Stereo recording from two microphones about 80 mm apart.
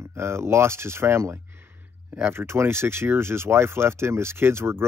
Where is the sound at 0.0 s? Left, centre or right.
Right.